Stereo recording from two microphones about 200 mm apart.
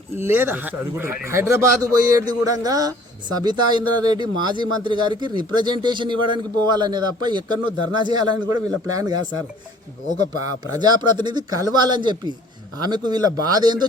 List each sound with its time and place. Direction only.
0.2 s a man's voice: 10° right (ahead or behind)
10.8 s a man's voice: 20° right (ahead or behind)